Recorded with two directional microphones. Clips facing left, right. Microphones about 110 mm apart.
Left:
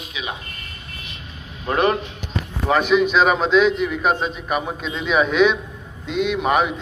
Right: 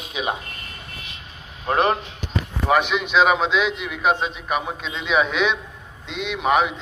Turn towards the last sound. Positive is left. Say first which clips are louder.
# left 1 dB
turn(degrees=0)  # may be behind; listen again after turning